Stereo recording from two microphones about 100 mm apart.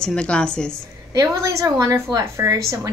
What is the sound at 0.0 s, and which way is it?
Speech, 10° left (ahead or behind).